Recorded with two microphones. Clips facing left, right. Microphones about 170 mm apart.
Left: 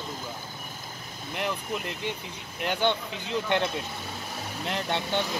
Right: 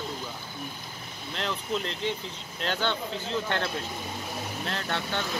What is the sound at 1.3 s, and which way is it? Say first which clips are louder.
Speech: even; 10° left (ahead or behind).